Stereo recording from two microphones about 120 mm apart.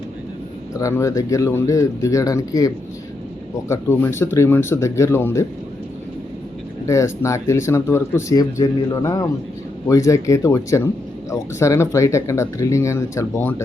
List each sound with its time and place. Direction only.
0.8 s speech: 25° left (ahead or behind)
6.8 s speech: 25° left (ahead or behind)